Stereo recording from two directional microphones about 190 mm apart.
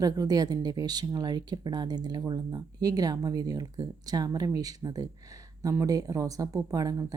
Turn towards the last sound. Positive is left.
turn(degrees=-20)  # may be behind; listen again after turning